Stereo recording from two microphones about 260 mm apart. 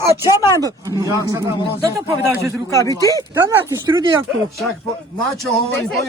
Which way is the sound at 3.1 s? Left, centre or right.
Centre.